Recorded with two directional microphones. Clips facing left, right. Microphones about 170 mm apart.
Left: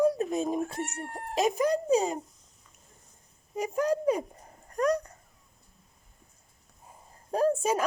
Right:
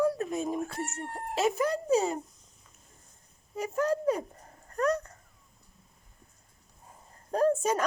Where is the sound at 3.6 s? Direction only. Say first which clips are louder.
Left 1 dB; 15° left (ahead or behind).